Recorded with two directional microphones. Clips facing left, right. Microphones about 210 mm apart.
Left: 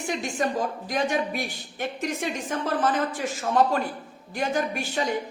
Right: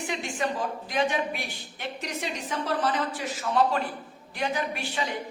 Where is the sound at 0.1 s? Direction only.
45° left (ahead or behind).